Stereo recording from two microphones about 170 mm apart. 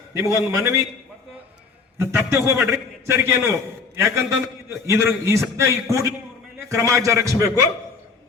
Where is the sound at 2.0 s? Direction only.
15° right (ahead or behind).